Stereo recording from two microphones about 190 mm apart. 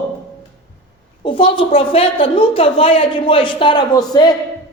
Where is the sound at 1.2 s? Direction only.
30° left (ahead or behind).